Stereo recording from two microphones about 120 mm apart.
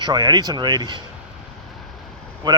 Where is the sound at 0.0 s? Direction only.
35° right (ahead or behind).